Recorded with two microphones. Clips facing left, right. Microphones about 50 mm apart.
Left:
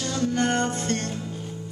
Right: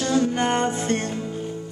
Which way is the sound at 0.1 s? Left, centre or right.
Centre.